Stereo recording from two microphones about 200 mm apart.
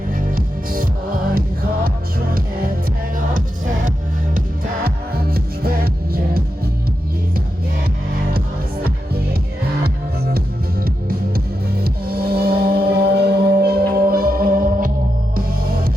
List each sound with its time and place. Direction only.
0.1 s music: 45° right (ahead or behind)
4.4 s music: 50° right (ahead or behind)
10.3 s music: 50° right (ahead or behind)